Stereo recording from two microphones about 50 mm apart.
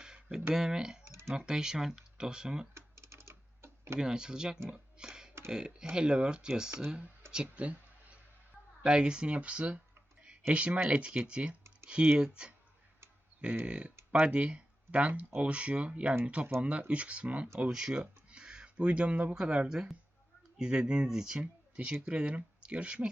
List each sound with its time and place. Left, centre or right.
0.0 s a sound: centre
0.5 s speech: centre
1.0 s computer keyboard: right
1.3 s speech: centre
2.7 s typing: right
3.9 s speech: centre
4.7 s a sound: centre
5.5 s speech: centre
7.4 s a sound: right
8.8 s speech: centre
13.7 s speech: right
17.7 s speech: centre